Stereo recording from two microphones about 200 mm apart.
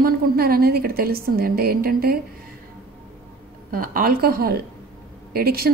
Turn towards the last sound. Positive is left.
turn(degrees=-50)  # may be behind; listen again after turning